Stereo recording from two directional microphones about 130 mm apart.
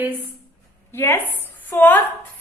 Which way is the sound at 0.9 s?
20° left (ahead or behind).